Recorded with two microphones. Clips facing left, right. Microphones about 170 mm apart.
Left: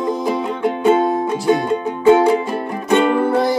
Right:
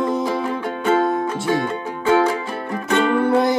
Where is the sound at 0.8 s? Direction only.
20° left (ahead or behind).